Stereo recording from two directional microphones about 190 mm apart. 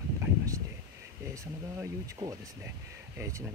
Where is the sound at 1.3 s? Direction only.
15° right (ahead or behind).